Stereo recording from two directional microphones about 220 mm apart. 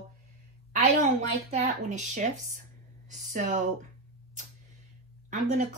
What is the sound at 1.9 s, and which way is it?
Speech, 35° right (ahead or behind).